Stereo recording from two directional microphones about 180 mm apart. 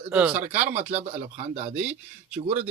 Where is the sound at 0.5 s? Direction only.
40° right (ahead or behind).